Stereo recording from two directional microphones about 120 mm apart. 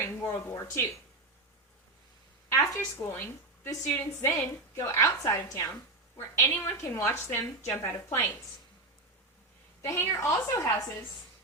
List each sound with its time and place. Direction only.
0.0 s speech: 20° left (ahead or behind)
2.5 s a woman's voice: 25° left (ahead or behind)
9.8 s a woman's voice: 25° left (ahead or behind)